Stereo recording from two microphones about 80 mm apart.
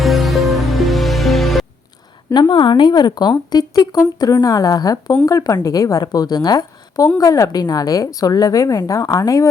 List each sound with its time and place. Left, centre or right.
0.0 s music: centre
2.3 s a woman's voice: left